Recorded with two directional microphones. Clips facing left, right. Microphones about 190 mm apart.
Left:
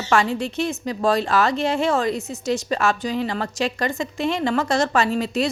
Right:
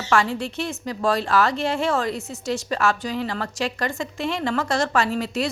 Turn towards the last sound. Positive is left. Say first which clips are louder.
# left 2 dB
turn(degrees=20)  # may be behind; listen again after turning